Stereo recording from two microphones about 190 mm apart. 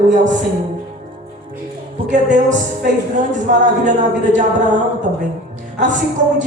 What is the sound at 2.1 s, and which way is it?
Music, 40° right (ahead or behind).